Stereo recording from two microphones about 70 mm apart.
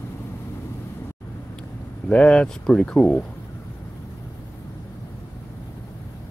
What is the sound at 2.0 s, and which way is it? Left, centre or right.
Speech, centre.